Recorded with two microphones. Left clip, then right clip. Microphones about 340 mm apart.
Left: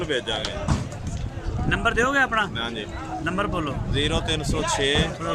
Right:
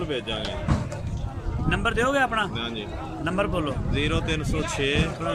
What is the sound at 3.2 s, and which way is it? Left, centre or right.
Speech, centre.